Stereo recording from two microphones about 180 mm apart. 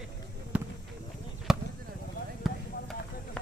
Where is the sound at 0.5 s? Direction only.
10° right (ahead or behind).